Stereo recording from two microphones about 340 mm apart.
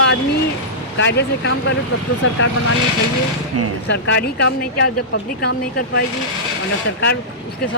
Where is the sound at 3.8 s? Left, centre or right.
Left.